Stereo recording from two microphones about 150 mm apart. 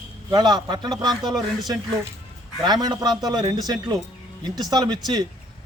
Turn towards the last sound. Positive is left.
turn(degrees=-25)  # may be behind; listen again after turning